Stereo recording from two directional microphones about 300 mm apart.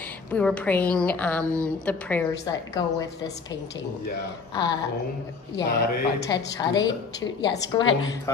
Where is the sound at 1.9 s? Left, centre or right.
Centre.